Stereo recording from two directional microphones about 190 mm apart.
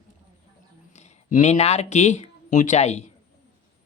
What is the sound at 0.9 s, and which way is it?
Speech, 35° left (ahead or behind).